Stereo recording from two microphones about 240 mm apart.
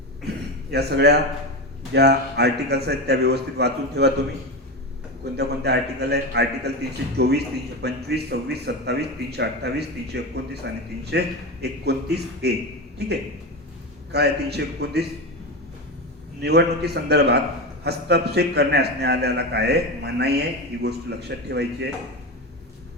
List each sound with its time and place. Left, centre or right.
0.7 s a man's voice: right
5.4 s a man's voice: right
16.4 s a man's voice: right